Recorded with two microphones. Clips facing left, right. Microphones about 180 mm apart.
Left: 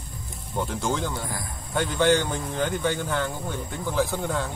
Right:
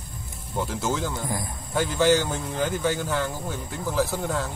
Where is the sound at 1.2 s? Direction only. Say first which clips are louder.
Right 4 dB; 20° right (ahead or behind).